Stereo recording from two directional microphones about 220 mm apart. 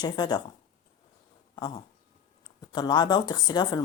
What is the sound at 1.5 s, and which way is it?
A woman's voice, 20° left (ahead or behind).